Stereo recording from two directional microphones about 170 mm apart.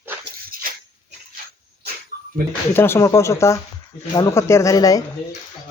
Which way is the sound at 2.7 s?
15° left (ahead or behind).